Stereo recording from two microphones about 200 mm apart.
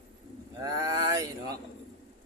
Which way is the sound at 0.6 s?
20° right (ahead or behind).